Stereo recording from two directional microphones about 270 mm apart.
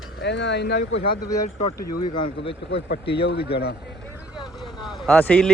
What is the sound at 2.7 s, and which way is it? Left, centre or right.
Speech, left.